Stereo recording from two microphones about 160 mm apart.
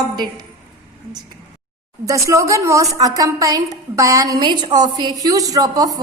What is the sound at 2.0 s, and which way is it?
A woman's voice, 20° right (ahead or behind).